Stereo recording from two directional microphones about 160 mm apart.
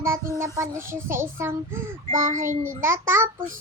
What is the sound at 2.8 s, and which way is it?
Speech, 15° right (ahead or behind).